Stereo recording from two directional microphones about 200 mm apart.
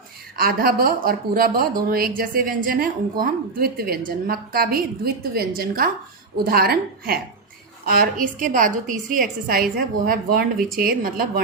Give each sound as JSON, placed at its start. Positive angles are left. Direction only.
{"t": 0.3, "sound": "a woman's voice", "side_deg": -50}